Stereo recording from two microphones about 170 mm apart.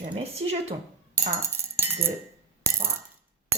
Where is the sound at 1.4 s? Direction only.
15° right (ahead or behind).